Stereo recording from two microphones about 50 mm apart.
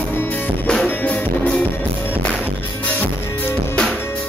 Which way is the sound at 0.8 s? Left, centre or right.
Left.